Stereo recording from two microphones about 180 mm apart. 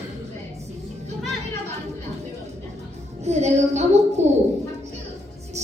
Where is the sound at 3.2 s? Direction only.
40° right (ahead or behind).